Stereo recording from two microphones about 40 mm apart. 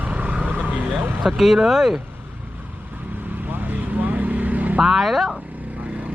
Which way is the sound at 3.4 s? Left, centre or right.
Right.